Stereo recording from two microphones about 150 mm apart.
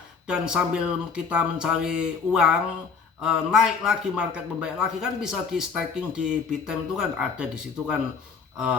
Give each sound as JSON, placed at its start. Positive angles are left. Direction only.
{"t": 0.3, "sound": "a man's voice", "side_deg": -5}